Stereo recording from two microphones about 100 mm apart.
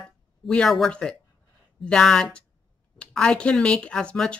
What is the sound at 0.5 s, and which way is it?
Speech, 5° left (ahead or behind).